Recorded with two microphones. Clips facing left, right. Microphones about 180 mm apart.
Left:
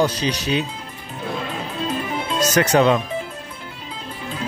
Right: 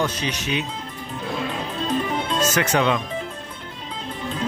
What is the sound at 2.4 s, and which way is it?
Speech, 40° left (ahead or behind).